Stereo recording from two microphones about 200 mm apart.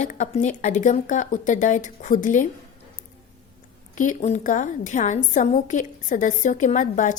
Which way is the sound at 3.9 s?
35° left (ahead or behind).